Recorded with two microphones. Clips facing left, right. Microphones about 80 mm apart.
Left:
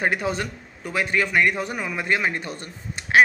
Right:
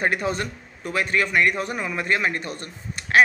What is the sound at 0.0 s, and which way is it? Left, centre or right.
A man's voice, centre.